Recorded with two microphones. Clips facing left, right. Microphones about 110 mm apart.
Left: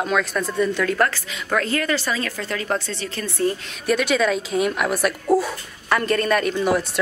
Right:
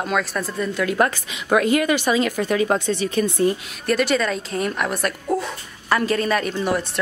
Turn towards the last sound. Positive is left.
turn(degrees=0)  # may be behind; listen again after turning